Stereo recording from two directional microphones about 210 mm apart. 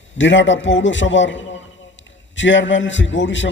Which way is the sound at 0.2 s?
60° left (ahead or behind).